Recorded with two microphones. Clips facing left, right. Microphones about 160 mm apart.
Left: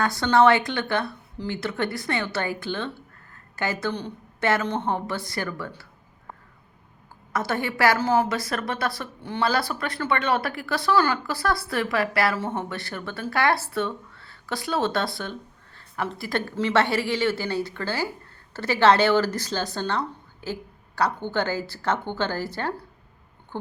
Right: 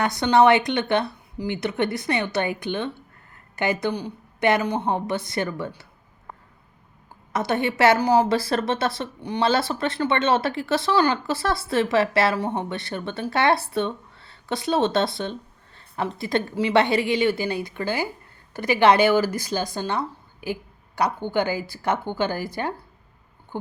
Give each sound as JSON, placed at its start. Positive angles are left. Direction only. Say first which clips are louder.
{"t": 0.0, "sound": "speech", "louder": "right 1 dB", "side_deg": -20}
{"t": 7.3, "sound": "speech", "louder": "right 3 dB", "side_deg": -20}
{"t": 8.3, "sound": "speech", "louder": "right 5 dB", "side_deg": -30}